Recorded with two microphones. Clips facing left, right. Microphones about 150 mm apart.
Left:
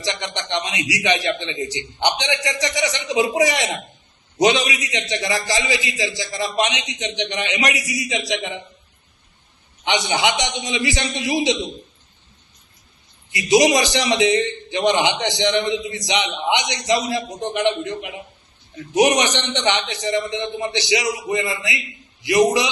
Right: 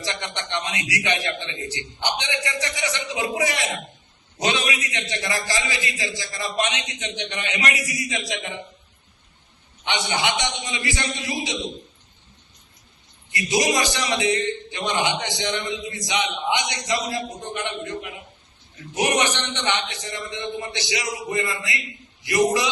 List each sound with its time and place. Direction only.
0.1 s a man's voice: 90° left
2.0 s a man's voice: 90° left
9.8 s a man's voice: 90° left
13.3 s a man's voice: 85° left